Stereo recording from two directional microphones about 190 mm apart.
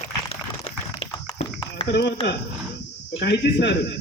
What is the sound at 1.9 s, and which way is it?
Speech, 60° left (ahead or behind).